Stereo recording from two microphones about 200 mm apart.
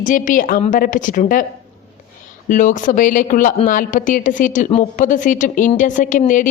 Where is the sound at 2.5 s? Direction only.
40° left (ahead or behind).